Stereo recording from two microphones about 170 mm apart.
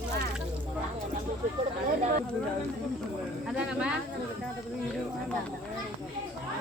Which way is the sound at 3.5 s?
5° right (ahead or behind).